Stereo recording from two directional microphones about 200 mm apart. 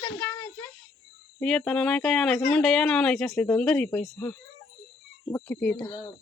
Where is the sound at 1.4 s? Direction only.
5° left (ahead or behind).